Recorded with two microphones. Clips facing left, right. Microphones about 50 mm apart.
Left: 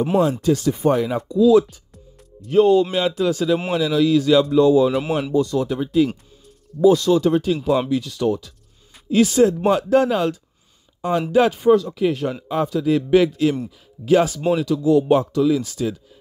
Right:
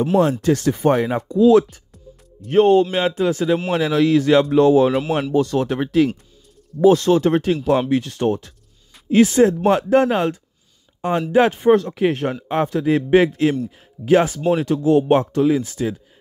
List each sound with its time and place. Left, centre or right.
0.2 s speech: right
3.7 s speech: right
4.6 s speech: right
6.8 s speech: right